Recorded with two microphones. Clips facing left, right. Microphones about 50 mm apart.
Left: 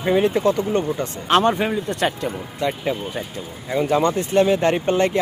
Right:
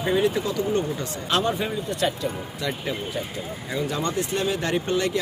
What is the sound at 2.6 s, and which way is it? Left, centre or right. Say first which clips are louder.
Speech: left 6 dB; left.